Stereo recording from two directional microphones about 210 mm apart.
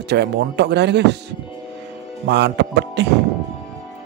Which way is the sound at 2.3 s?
55° right (ahead or behind).